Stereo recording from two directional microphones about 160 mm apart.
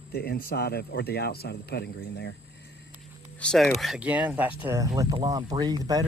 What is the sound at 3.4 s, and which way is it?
Speech, 5° left (ahead or behind).